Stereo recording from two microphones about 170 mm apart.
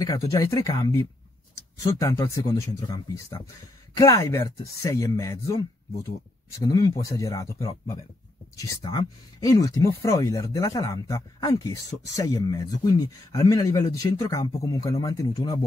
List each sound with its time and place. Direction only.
0.0 s speech: 20° left (ahead or behind)